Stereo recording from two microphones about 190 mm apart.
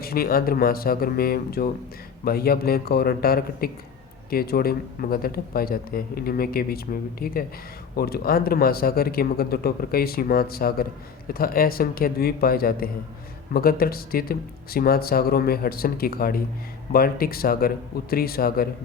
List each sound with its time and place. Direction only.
0.0 s a man's voice: 50° left (ahead or behind)